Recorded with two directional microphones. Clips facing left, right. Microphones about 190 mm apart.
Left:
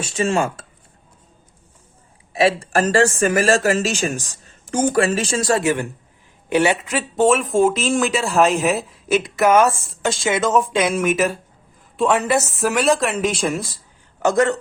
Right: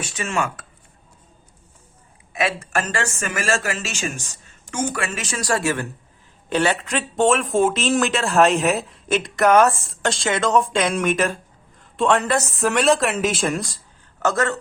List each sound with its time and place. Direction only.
0.0 s speech: 30° left (ahead or behind)
2.3 s speech: 30° left (ahead or behind); by 7.0 s 10° left (ahead or behind)
7.2 s speech: centre (ahead or behind)
14.2 s speech: 15° left (ahead or behind)